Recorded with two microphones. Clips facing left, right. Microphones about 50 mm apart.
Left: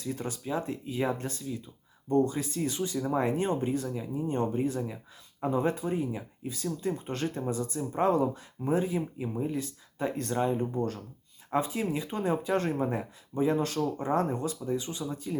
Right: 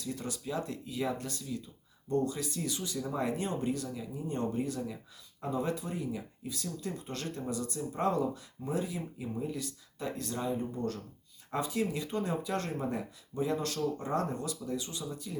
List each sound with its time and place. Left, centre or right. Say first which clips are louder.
0.0 s speech: left 3 dB; left
10.2 s speech: left 6 dB; left
10.8 s speech: left 4 dB; left